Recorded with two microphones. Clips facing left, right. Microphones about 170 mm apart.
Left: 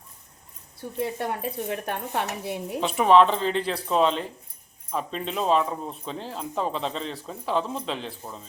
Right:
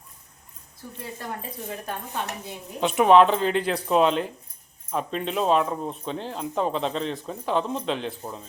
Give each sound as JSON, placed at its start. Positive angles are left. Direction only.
{"t": 0.8, "sound": "speech", "side_deg": 70}
{"t": 2.8, "sound": "speech", "side_deg": -5}